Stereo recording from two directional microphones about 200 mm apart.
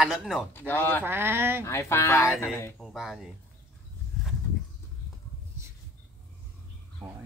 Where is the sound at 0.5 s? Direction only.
10° left (ahead or behind).